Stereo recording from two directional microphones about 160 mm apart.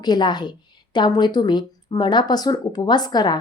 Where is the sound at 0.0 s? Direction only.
25° left (ahead or behind).